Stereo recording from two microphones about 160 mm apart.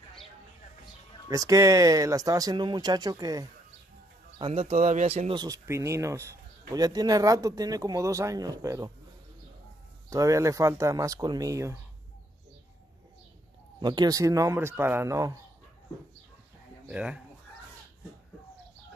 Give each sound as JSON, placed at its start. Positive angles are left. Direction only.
{"t": 1.3, "sound": "speech", "side_deg": -20}
{"t": 4.4, "sound": "speech", "side_deg": -40}
{"t": 4.7, "sound": "speech", "side_deg": -50}
{"t": 5.4, "sound": "speech", "side_deg": -20}
{"t": 10.0, "sound": "speech", "side_deg": -20}
{"t": 13.7, "sound": "speech", "side_deg": -25}
{"t": 16.8, "sound": "speech", "side_deg": -5}